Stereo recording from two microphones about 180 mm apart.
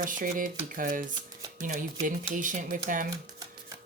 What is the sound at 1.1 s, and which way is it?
Shuffling cards, 20° right (ahead or behind).